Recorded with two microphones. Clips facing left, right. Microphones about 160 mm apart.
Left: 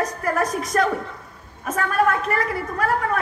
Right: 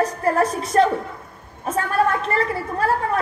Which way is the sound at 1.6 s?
30° right (ahead or behind).